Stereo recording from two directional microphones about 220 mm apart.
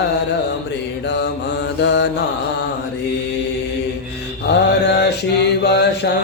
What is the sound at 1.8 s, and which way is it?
Mantra, 50° left (ahead or behind).